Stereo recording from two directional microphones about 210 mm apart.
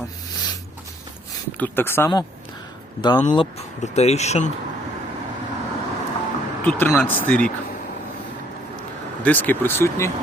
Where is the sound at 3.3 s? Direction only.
25° left (ahead or behind).